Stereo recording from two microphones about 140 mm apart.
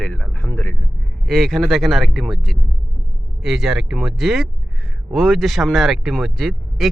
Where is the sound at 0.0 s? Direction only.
10° left (ahead or behind).